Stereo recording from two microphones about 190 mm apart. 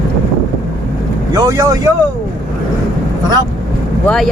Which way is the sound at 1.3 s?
20° right (ahead or behind).